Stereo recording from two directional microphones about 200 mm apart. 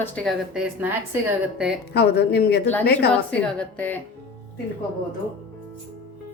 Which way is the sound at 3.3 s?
10° left (ahead or behind).